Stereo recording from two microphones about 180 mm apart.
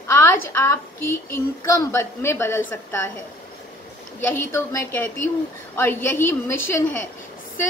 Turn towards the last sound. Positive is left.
turn(degrees=15)  # may be behind; listen again after turning